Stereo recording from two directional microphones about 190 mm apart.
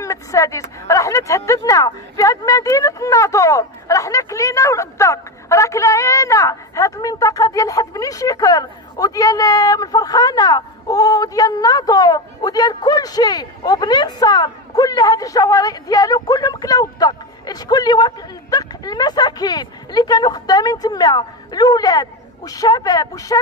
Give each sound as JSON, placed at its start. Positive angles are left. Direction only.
{"t": 0.0, "sound": "speech", "side_deg": 15}